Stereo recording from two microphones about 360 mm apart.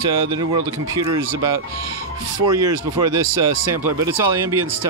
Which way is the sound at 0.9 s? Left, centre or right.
Centre.